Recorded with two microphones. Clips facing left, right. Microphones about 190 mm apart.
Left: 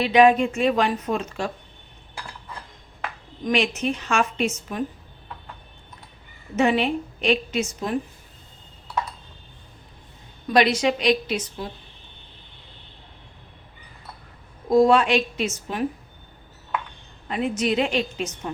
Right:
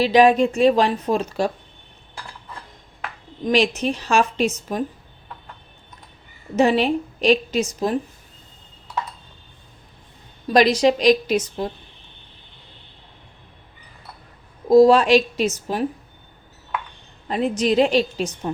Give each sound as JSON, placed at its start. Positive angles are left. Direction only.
{"t": 0.0, "sound": "a woman's voice", "side_deg": -35}
{"t": 3.4, "sound": "a woman's voice", "side_deg": -35}
{"t": 6.6, "sound": "a woman's voice", "side_deg": -35}
{"t": 10.5, "sound": "a woman's voice", "side_deg": -35}
{"t": 14.7, "sound": "a woman's voice", "side_deg": -35}
{"t": 17.2, "sound": "a woman's voice", "side_deg": -35}